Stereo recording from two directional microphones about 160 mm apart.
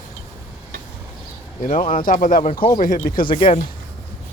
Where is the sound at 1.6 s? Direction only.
55° left (ahead or behind).